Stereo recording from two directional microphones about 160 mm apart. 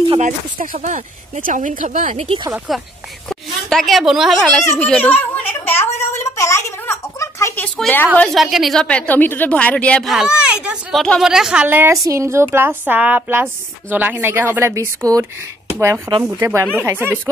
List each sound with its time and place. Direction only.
0.2 s speech: 50° right (ahead or behind)
2.2 s speech: 35° right (ahead or behind)
3.3 s a woman's voice: centre (ahead or behind)
5.9 s a sound: 20° left (ahead or behind)
8.2 s a woman's voice: centre (ahead or behind)